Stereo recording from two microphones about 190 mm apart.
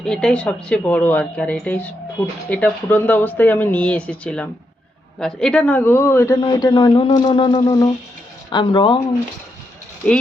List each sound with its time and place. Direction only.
0.0 s a man's voice: 5° left (ahead or behind); by 9.0 s 25° left (ahead or behind)
10.0 s speech: 5° left (ahead or behind)